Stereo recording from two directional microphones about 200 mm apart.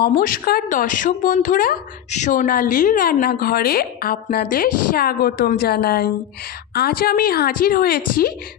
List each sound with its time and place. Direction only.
0.2 s a woman's voice: 45° left (ahead or behind)